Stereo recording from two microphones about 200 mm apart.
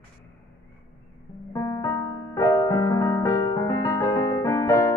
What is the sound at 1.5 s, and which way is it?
Music, 15° left (ahead or behind).